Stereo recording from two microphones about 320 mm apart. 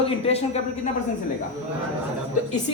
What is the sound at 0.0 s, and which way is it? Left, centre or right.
Speech, centre.